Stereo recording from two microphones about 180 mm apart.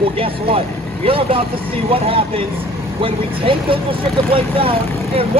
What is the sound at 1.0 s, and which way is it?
Speech, 30° right (ahead or behind).